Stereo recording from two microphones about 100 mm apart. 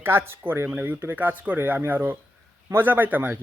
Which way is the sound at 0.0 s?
25° right (ahead or behind).